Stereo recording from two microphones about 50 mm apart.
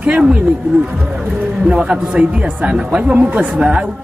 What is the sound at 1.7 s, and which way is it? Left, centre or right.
Speech, centre.